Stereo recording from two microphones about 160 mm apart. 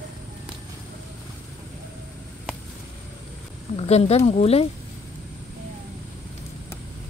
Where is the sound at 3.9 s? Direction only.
40° left (ahead or behind).